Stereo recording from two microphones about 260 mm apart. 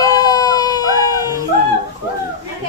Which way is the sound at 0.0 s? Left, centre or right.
Centre.